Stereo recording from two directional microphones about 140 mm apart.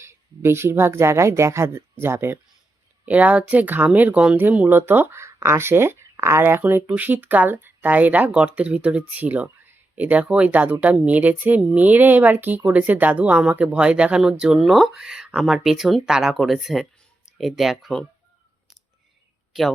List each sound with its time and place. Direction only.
0.0 s speech: 20° right (ahead or behind); by 18.0 s centre (ahead or behind)